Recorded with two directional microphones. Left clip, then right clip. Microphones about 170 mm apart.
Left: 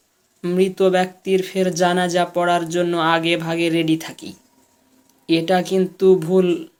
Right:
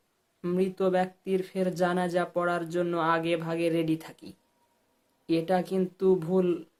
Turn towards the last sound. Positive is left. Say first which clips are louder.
# left 10 dB
turn(degrees=-5)  # may be behind; listen again after turning